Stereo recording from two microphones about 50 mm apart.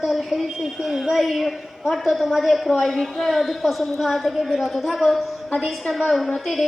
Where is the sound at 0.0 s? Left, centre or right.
Centre.